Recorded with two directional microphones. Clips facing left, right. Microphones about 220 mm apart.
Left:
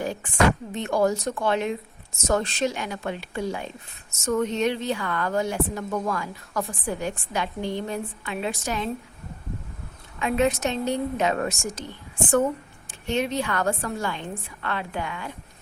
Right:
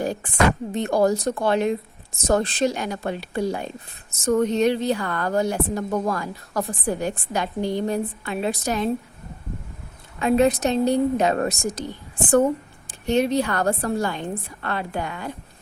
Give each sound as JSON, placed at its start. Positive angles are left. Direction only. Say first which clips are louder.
{"t": 0.0, "sound": "a sound", "louder": "right 4 dB", "side_deg": -40}
{"t": 0.7, "sound": "a woman's voice", "louder": "right 3 dB", "side_deg": -35}
{"t": 10.2, "sound": "a woman's voice", "louder": "right 5 dB", "side_deg": -40}
{"t": 12.9, "sound": "a woman's voice", "louder": "right 6 dB", "side_deg": -40}